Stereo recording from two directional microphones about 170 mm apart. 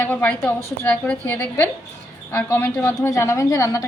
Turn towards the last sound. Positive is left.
turn(degrees=20)  # may be behind; listen again after turning